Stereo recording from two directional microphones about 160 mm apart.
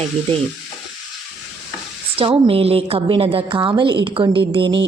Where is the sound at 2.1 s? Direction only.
35° right (ahead or behind).